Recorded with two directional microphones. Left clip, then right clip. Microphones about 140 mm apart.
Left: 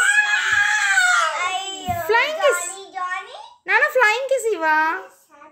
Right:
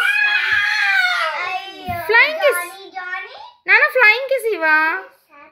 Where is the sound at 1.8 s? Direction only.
Centre (ahead or behind).